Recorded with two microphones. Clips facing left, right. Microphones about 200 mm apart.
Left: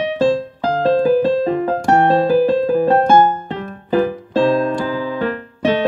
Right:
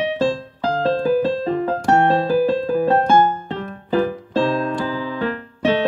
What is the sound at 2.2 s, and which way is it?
Keyboard, 50° left (ahead or behind).